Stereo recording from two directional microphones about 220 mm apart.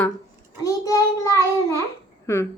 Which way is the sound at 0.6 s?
15° left (ahead or behind).